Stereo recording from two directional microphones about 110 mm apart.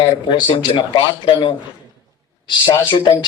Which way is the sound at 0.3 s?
45° left (ahead or behind).